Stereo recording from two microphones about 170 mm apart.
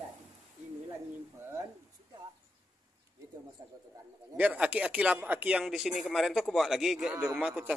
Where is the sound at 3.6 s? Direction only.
20° right (ahead or behind).